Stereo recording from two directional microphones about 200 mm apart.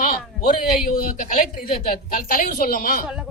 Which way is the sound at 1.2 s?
40° left (ahead or behind).